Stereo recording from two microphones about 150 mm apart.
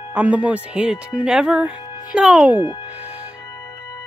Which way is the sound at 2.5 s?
30° left (ahead or behind).